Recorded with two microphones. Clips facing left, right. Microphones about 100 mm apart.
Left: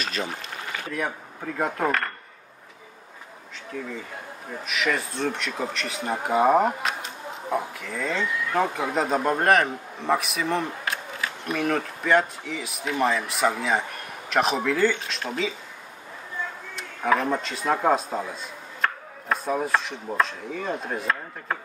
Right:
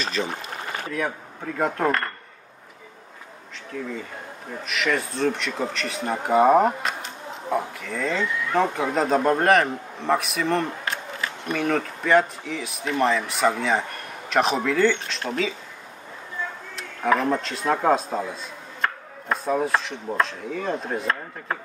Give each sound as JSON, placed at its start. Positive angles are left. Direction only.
{"t": 0.0, "sound": "a sound", "side_deg": -30}
{"t": 0.9, "sound": "speech", "side_deg": 0}
{"t": 4.6, "sound": "speech", "side_deg": 0}
{"t": 16.7, "sound": "speech", "side_deg": 0}